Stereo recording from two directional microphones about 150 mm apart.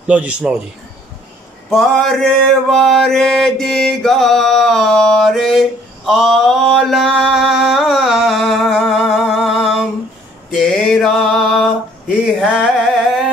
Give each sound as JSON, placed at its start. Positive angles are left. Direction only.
{"t": 0.0, "sound": "speech", "side_deg": -10}
{"t": 1.7, "sound": "mantra", "side_deg": 0}
{"t": 10.6, "sound": "music", "side_deg": 0}
{"t": 12.4, "sound": "a sound", "side_deg": -5}